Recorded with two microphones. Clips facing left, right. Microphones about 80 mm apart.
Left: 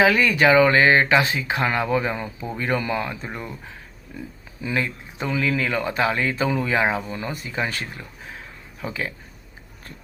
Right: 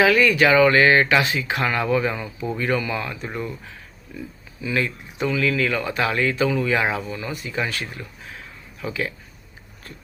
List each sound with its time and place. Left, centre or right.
0.0 s speech: left
3.2 s speech: centre
4.7 s speech: left
7.1 s speech: left